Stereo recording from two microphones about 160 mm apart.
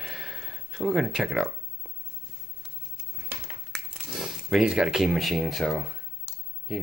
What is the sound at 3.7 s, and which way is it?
Speech, centre (ahead or behind).